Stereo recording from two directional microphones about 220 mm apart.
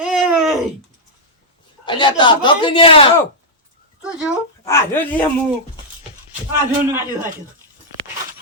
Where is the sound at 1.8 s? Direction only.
20° left (ahead or behind).